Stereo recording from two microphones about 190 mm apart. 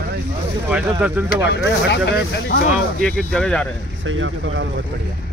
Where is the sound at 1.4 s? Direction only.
65° left (ahead or behind).